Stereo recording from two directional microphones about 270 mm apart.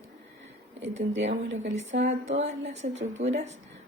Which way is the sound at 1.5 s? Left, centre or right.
Right.